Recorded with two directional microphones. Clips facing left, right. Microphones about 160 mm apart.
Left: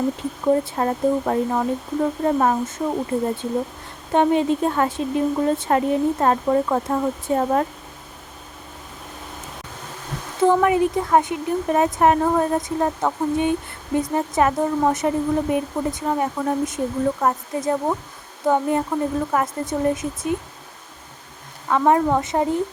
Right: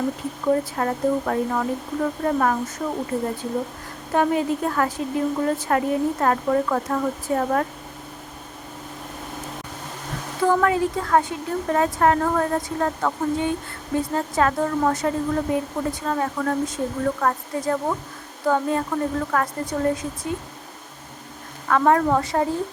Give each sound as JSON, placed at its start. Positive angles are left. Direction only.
{"t": 0.4, "sound": "speech", "side_deg": 25}
{"t": 10.4, "sound": "speech", "side_deg": 20}
{"t": 21.7, "sound": "a woman's voice", "side_deg": 20}